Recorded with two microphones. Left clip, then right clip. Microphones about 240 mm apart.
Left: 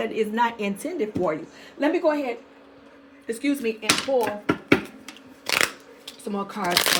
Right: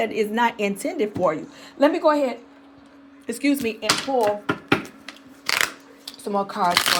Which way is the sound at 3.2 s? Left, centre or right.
Right.